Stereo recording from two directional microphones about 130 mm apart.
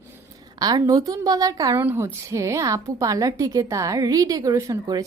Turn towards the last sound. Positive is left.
turn(degrees=-25)  # may be behind; listen again after turning